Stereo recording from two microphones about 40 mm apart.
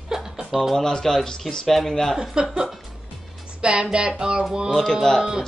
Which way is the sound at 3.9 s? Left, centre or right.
Right.